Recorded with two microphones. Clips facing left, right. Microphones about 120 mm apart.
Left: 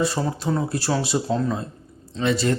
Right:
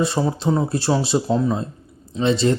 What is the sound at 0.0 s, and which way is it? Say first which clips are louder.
Speech: right 3 dB; 25° right (ahead or behind).